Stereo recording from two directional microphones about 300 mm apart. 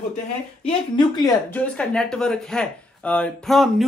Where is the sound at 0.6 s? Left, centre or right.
Centre.